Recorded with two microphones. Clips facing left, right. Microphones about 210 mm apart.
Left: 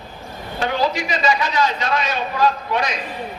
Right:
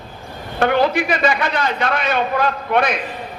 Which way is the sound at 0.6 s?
55° right (ahead or behind).